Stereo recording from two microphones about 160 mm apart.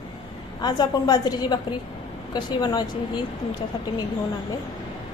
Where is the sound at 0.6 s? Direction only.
25° left (ahead or behind).